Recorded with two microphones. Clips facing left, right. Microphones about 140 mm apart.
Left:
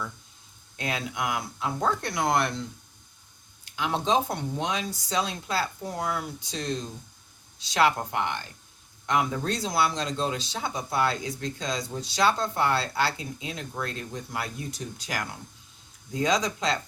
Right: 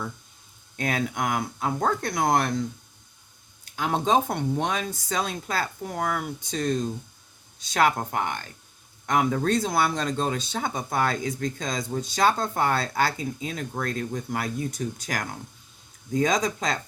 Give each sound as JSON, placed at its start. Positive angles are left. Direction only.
{"t": 0.8, "sound": "speech", "side_deg": -50}
{"t": 3.8, "sound": "speech", "side_deg": -50}